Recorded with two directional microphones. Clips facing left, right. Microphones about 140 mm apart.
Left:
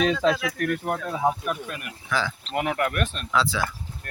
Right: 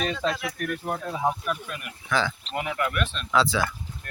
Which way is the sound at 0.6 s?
70° left (ahead or behind).